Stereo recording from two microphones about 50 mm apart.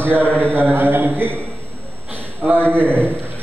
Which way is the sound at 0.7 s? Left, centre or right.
Right.